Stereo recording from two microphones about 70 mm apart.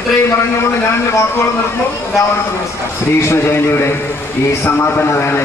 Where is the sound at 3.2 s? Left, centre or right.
Left.